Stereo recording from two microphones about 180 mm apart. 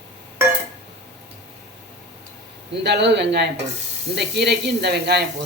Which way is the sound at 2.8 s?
70° right (ahead or behind).